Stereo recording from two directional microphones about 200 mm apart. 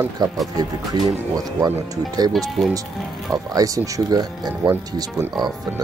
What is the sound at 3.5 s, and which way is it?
Speech, 15° right (ahead or behind).